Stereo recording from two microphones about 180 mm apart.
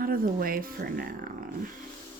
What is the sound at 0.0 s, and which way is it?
Speech, 55° right (ahead or behind).